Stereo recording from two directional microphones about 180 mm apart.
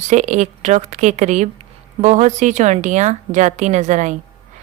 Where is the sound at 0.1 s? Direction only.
40° right (ahead or behind).